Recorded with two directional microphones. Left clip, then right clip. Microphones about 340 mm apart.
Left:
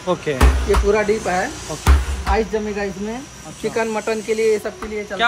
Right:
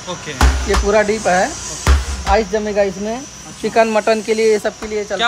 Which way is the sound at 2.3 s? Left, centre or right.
Right.